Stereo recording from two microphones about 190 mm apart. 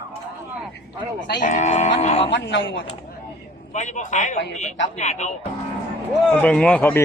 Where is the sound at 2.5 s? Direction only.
85° left.